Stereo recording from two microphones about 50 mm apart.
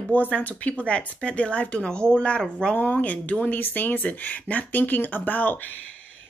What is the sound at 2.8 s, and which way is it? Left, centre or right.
Speech, left.